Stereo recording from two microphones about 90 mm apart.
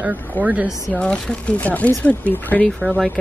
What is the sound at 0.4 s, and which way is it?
Speech, 15° right (ahead or behind).